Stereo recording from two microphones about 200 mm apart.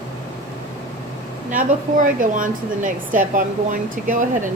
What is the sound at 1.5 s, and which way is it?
Speech, 40° right (ahead or behind).